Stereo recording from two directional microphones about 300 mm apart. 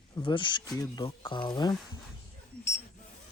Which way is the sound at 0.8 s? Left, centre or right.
Centre.